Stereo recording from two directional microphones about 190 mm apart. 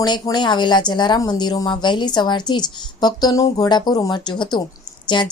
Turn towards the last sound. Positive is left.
turn(degrees=25)  # may be behind; listen again after turning